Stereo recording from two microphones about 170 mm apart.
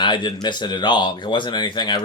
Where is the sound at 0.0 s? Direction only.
25° left (ahead or behind).